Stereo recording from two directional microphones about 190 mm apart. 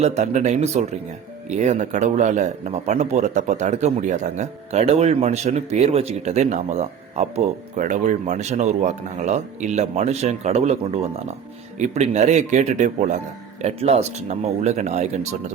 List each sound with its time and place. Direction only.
0.0 s a man's voice: 35° right (ahead or behind)